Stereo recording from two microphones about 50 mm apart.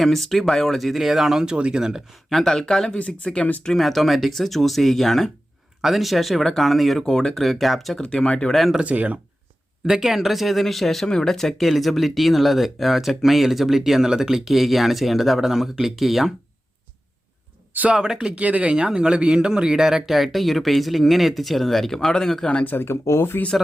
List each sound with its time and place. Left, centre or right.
0.0 s speech: centre
1.5 s speech: centre
2.3 s speech: centre
3.8 s speech: centre
8.0 s speech: left
8.8 s speech: right
9.8 s speech: centre
17.9 s speech: centre
22.6 s speech: left
22.9 s speech: left